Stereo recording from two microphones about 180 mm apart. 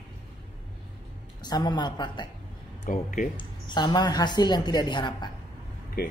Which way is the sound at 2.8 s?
45° left (ahead or behind).